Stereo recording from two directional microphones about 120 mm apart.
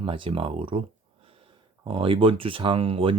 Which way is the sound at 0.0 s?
45° right (ahead or behind).